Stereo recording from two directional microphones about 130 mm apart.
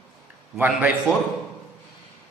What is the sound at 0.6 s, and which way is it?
Speech, 10° right (ahead or behind).